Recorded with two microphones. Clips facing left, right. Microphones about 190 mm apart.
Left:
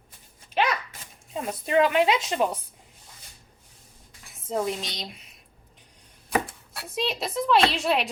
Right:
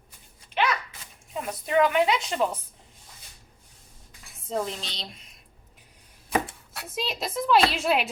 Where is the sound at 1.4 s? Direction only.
20° left (ahead or behind).